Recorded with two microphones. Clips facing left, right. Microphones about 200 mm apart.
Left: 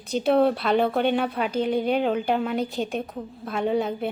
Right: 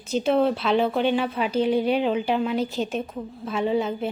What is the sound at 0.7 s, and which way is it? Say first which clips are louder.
Speech: even; 50° left (ahead or behind).